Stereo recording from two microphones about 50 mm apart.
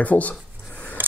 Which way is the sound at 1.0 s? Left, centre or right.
Right.